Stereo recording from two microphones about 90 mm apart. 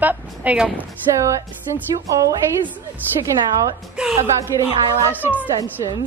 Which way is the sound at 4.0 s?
10° right (ahead or behind).